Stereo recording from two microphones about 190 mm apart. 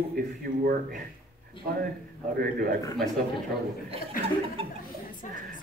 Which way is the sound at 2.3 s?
50° right (ahead or behind).